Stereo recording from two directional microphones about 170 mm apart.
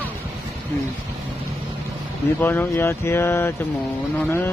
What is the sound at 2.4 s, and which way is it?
Speech, 10° left (ahead or behind).